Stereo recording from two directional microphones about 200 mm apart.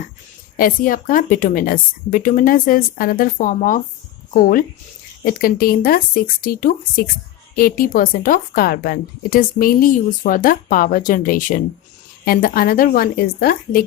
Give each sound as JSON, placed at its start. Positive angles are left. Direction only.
{"t": 0.5, "sound": "speech", "side_deg": 45}